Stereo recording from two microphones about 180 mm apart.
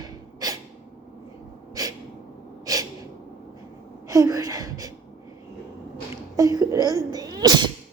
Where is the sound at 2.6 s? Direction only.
20° right (ahead or behind).